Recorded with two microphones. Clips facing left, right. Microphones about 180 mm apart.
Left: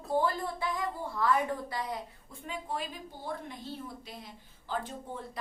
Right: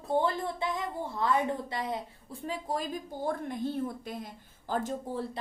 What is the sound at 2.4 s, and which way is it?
A woman's voice, 35° right (ahead or behind).